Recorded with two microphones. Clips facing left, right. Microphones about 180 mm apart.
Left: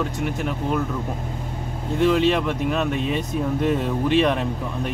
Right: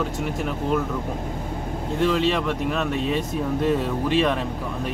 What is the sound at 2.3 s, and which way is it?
Speech, 5° left (ahead or behind).